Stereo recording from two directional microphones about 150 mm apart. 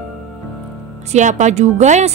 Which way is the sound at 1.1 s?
50° right (ahead or behind).